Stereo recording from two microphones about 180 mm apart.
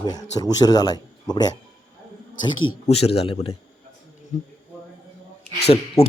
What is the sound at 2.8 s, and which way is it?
Speech, 35° left (ahead or behind).